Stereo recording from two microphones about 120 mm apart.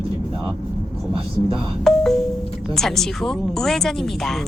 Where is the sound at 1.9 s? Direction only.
5° left (ahead or behind).